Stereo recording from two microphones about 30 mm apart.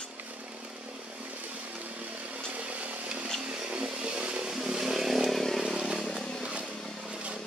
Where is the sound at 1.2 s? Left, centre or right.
Right.